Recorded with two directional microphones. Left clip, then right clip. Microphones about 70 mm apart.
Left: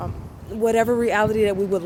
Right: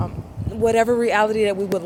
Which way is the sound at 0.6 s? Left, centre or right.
Left.